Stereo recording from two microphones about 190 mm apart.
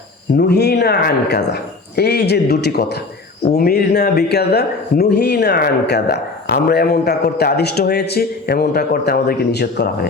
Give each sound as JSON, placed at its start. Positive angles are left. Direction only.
{"t": 0.3, "sound": "speech", "side_deg": 60}